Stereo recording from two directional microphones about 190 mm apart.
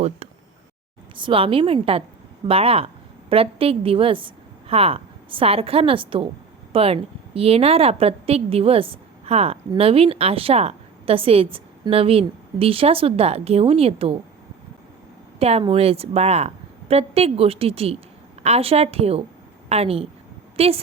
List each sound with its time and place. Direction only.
1.1 s a woman's voice: 25° right (ahead or behind)
15.4 s a woman's voice: 30° right (ahead or behind)